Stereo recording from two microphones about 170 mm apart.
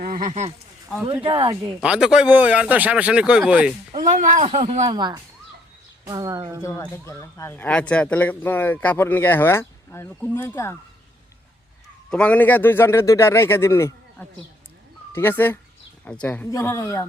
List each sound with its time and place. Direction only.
0.0 s speech: 55° right (ahead or behind)
1.0 s speech: 30° right (ahead or behind)
1.8 s speech: 5° right (ahead or behind)
4.1 s speech: 50° right (ahead or behind)
4.9 s speech: 25° right (ahead or behind)
6.6 s speech: 15° left (ahead or behind)
12.1 s speech: 10° left (ahead or behind)